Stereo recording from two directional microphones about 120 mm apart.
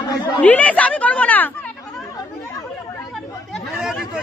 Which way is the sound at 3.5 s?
Centre (ahead or behind).